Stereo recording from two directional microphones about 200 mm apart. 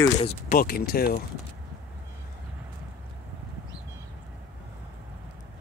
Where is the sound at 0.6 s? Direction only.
50° left (ahead or behind).